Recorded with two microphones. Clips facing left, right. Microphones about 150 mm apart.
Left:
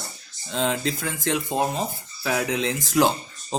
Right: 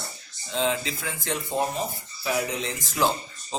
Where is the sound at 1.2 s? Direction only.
90° left.